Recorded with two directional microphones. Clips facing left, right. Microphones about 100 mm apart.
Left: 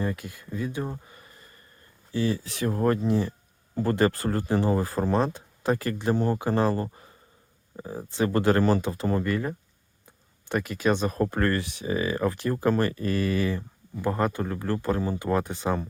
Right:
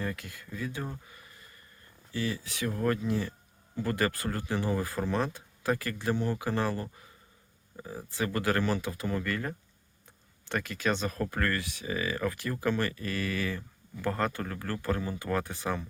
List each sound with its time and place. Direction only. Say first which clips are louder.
0.0 s speech: left 6 dB; 20° left (ahead or behind)
6.1 s speech: left 6 dB; 40° left (ahead or behind)
9.2 s speech: left 6 dB; 15° left (ahead or behind)
14.0 s speech: left 5 dB; 15° left (ahead or behind)